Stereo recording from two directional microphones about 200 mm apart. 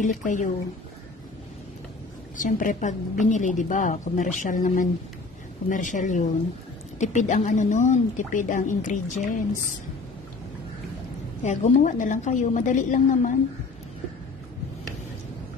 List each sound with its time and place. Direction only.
0.0 s speech: 40° left (ahead or behind)
2.3 s speech: 40° left (ahead or behind)
11.4 s speech: 40° left (ahead or behind)